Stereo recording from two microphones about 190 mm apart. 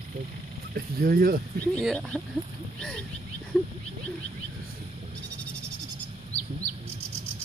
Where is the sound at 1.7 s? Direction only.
5° left (ahead or behind).